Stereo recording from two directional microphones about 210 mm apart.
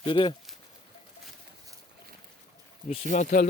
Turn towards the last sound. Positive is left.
turn(degrees=40)  # may be behind; listen again after turning